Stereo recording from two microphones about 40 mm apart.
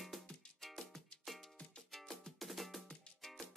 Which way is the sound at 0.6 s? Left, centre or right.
Centre.